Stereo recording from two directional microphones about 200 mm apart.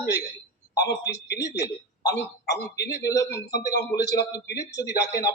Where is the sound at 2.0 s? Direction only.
20° left (ahead or behind).